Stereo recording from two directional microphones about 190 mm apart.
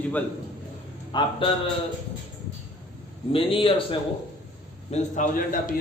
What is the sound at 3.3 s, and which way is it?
Speech, 30° left (ahead or behind).